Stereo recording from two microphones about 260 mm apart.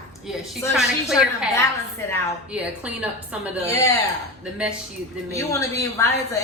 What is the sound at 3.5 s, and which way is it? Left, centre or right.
Speech, right.